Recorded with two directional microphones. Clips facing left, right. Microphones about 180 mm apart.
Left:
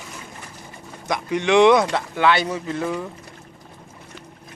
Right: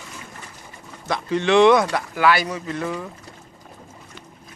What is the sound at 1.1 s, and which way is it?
Speech, 15° left (ahead or behind).